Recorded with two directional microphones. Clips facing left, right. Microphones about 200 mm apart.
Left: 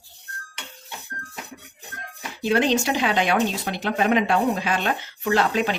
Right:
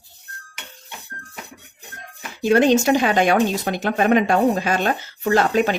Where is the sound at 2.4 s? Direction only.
45° right (ahead or behind).